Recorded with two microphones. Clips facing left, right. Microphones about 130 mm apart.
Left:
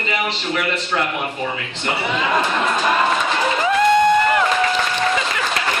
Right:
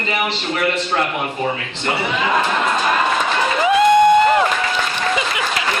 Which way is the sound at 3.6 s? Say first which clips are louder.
Right 3 dB; 15° right (ahead or behind).